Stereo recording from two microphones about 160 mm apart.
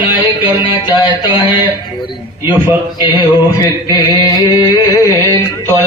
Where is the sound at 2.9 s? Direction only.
25° left (ahead or behind).